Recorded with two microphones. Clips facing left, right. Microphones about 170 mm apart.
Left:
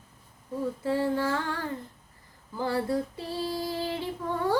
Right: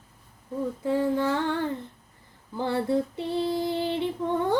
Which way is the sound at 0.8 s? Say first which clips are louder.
Right 3 dB; 20° right (ahead or behind).